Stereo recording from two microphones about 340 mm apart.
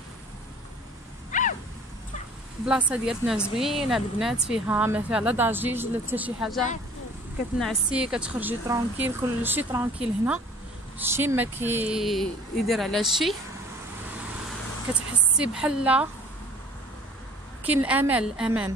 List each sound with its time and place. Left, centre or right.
1.3 s a sound: left
2.6 s speech: centre
15.0 s speech: centre
17.6 s speech: centre